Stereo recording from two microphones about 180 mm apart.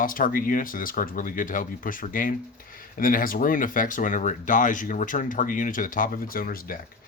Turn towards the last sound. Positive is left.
turn(degrees=50)  # may be behind; listen again after turning